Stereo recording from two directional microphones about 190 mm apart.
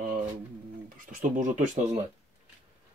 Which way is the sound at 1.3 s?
40° right (ahead or behind).